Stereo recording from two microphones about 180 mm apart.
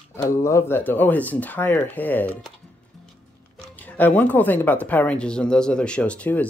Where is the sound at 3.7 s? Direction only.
10° left (ahead or behind).